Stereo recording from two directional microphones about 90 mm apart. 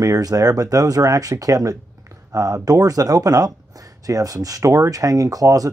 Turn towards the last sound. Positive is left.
turn(degrees=-40)  # may be behind; listen again after turning